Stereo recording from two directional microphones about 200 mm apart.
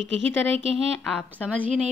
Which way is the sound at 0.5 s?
30° right (ahead or behind).